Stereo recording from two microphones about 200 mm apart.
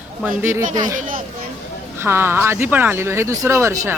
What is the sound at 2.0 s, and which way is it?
Speech, 10° right (ahead or behind).